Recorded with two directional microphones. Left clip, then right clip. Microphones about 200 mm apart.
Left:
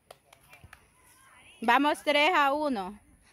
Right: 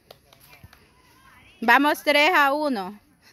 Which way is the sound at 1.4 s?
50° left (ahead or behind).